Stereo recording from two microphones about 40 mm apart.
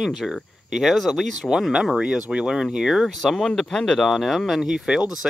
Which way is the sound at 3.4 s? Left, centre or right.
Centre.